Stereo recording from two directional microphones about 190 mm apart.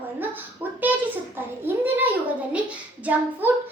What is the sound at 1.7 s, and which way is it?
A child's voice, 10° right (ahead or behind).